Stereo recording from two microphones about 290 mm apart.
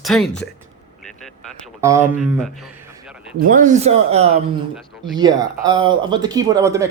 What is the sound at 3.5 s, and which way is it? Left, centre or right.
Speech, right.